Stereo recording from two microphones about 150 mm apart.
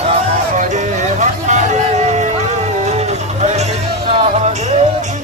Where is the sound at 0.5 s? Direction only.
55° right (ahead or behind).